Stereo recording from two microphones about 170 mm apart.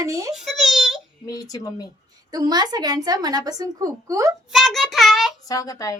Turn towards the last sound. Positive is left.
turn(degrees=20)  # may be behind; listen again after turning